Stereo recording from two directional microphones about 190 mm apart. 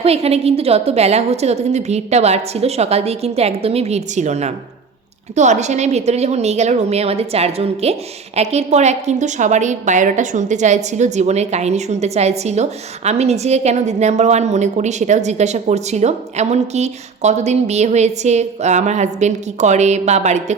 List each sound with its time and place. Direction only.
0.0 s a woman's voice: 30° right (ahead or behind)